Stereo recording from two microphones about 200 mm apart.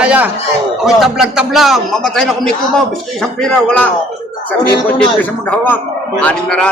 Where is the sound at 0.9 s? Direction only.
Centre (ahead or behind).